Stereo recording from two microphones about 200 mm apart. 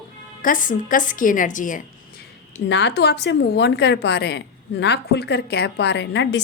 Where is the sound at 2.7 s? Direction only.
60° left (ahead or behind).